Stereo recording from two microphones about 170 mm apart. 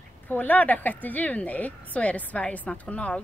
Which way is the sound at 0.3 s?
10° left (ahead or behind).